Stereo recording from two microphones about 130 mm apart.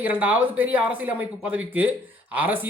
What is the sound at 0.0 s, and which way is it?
Speech, 15° right (ahead or behind).